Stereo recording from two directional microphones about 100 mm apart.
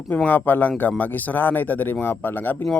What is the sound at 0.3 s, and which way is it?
A man's voice, 15° left (ahead or behind).